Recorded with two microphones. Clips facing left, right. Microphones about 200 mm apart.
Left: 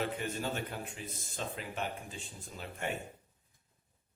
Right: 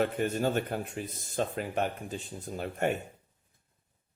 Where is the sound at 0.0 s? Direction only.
50° right (ahead or behind).